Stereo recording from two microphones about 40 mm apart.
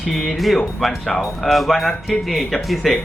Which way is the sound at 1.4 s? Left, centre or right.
Centre.